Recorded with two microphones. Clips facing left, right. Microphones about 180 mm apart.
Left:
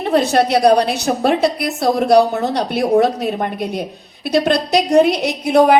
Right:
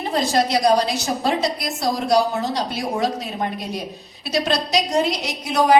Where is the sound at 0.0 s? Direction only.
65° left (ahead or behind).